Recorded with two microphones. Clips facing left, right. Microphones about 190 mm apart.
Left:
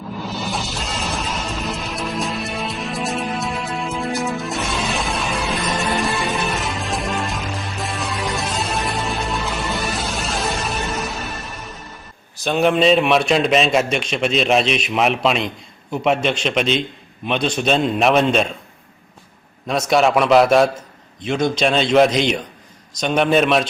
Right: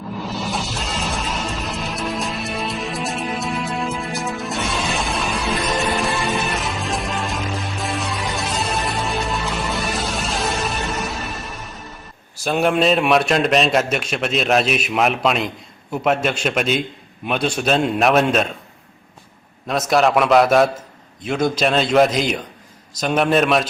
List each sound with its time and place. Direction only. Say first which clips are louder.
0.2 s music: even; centre (ahead or behind)
12.5 s a man's voice: left 2 dB; 5° right (ahead or behind)
19.9 s a man's voice: left 1 dB; centre (ahead or behind)